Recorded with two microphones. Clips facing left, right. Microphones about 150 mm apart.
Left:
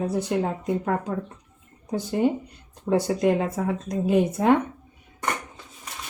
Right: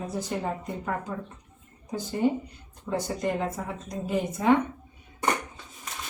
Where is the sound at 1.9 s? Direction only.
70° left (ahead or behind).